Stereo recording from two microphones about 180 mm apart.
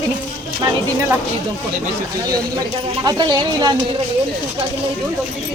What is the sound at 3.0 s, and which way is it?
Speech, 25° right (ahead or behind).